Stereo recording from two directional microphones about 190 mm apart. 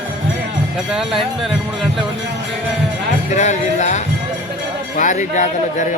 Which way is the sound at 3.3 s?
40° left (ahead or behind).